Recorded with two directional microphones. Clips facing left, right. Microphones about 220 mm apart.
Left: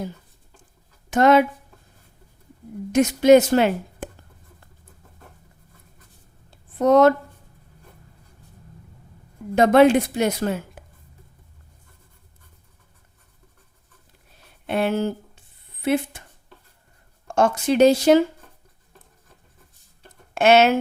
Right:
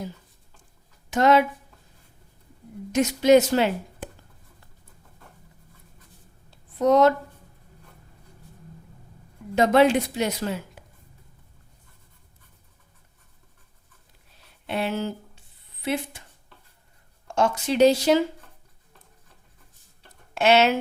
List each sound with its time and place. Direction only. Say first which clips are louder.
1.1 s a woman's voice: left 3 dB; 50° left (ahead or behind)
2.9 s a woman's voice: left 3 dB; 50° left (ahead or behind)
6.7 s a woman's voice: left 3 dB; 55° left (ahead or behind)
9.6 s a woman's voice: left 4 dB; 50° left (ahead or behind)
14.7 s a woman's voice: left 5 dB; 50° left (ahead or behind)
17.2 s a woman's voice: left 4 dB; 50° left (ahead or behind)
20.0 s a sound: left 4 dB; 50° left (ahead or behind)